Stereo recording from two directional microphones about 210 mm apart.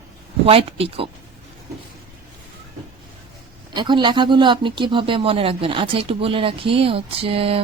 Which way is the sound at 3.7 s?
20° right (ahead or behind).